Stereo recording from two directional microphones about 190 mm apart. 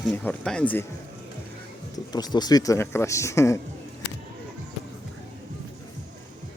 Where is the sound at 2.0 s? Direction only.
20° left (ahead or behind).